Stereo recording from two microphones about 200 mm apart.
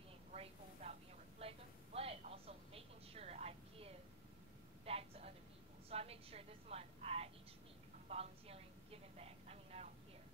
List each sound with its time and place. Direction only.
0.3 s a sound: 30° right (ahead or behind)
2.0 s vehicle: 30° right (ahead or behind)
4.8 s a woman's voice: 30° right (ahead or behind)
8.1 s vehicle: 30° right (ahead or behind)